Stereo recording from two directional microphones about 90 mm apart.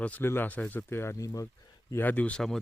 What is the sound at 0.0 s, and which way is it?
Speech, 15° left (ahead or behind).